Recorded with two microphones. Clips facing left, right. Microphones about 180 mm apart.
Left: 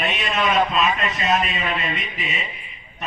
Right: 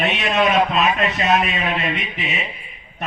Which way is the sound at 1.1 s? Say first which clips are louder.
Right 3 dB; 65° right (ahead or behind).